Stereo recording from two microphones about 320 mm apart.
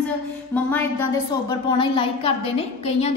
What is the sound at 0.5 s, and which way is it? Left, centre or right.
A woman's voice, centre.